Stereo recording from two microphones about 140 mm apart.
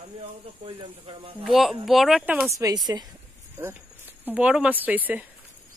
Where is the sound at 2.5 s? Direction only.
25° right (ahead or behind).